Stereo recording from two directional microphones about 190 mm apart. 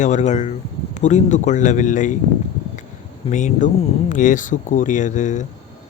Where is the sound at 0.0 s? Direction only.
40° left (ahead or behind).